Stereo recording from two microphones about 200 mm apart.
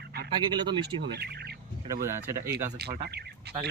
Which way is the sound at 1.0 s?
55° right (ahead or behind).